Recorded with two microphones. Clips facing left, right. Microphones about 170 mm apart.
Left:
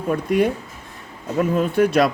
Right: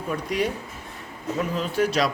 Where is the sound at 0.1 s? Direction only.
50° left (ahead or behind).